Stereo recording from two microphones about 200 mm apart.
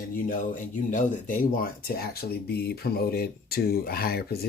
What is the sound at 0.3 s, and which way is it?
Speech, 40° left (ahead or behind).